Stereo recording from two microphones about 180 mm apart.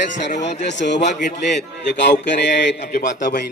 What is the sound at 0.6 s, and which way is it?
Music, 75° left (ahead or behind).